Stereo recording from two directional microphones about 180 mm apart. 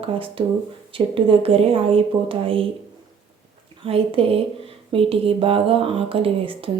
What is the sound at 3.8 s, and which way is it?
Speech, 30° right (ahead or behind).